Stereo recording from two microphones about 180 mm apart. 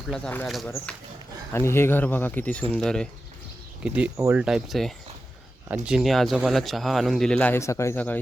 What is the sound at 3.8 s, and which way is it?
Speech, 5° right (ahead or behind).